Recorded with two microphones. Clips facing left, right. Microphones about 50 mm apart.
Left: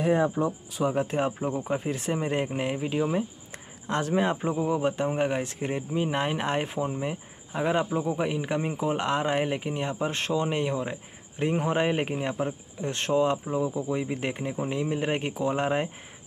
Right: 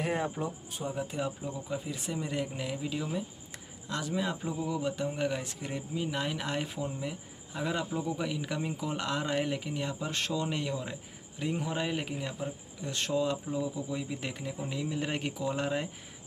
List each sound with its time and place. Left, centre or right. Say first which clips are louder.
0.8 s speech: left 8 dB; left